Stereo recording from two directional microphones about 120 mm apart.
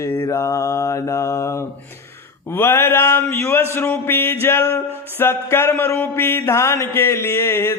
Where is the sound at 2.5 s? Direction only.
20° left (ahead or behind).